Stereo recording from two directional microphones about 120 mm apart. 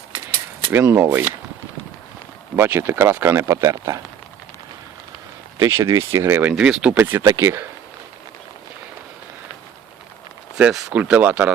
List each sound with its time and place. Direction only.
0.7 s speech: 20° right (ahead or behind)
2.6 s speech: 20° right (ahead or behind)
5.5 s speech: 20° right (ahead or behind)
7.3 s speech: 25° right (ahead or behind)
10.6 s speech: 5° right (ahead or behind)